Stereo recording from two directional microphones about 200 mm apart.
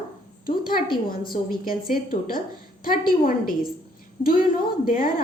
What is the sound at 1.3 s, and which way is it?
A woman's voice, 45° left (ahead or behind).